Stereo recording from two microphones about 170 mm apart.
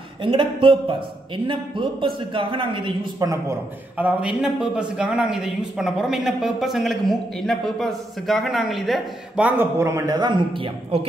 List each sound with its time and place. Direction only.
0.2 s speech: 30° right (ahead or behind)
4.0 s a man's voice: 5° right (ahead or behind); by 11.1 s 30° right (ahead or behind)